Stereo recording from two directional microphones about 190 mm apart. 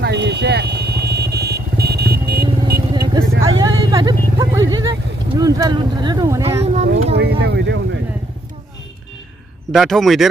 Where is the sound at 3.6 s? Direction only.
20° right (ahead or behind).